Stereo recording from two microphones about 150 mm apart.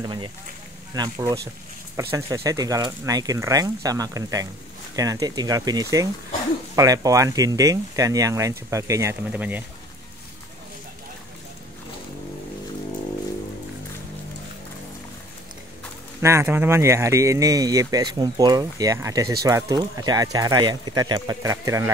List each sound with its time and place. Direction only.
0.0 s speech: 30° right (ahead or behind)
9.3 s speech: 10° right (ahead or behind)
16.2 s speech: 20° right (ahead or behind)